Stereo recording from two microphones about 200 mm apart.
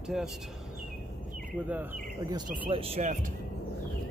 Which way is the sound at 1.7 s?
10° right (ahead or behind).